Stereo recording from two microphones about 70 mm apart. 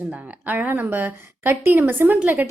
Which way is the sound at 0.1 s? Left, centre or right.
Right.